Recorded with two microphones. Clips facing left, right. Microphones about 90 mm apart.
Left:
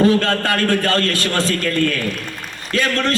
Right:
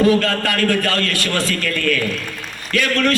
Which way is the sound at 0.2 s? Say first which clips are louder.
Left 1 dB; 30° left (ahead or behind).